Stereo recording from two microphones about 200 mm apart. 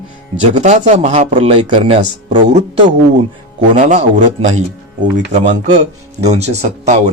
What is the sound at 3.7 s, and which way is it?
Speech, 40° right (ahead or behind).